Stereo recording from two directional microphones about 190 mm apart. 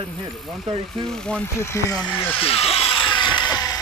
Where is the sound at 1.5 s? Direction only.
15° left (ahead or behind).